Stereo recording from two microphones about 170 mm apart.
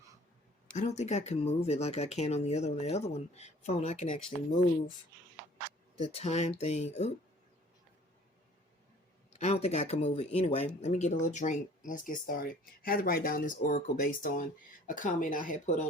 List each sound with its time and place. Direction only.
0.8 s speech: 40° left (ahead or behind)
6.0 s speech: 40° left (ahead or behind)
9.3 s speech: 40° left (ahead or behind)